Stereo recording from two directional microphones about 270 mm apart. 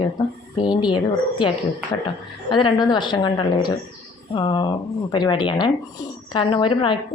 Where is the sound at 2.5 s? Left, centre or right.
Centre.